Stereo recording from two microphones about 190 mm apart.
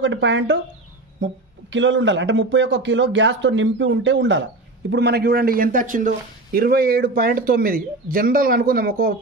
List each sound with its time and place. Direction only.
0.0 s speech: 75° right (ahead or behind); by 9.1 s 50° right (ahead or behind)